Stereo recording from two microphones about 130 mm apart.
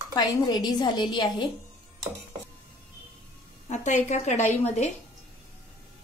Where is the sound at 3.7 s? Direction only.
65° left (ahead or behind).